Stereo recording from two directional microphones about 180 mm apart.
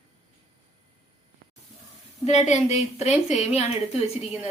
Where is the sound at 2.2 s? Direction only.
40° left (ahead or behind).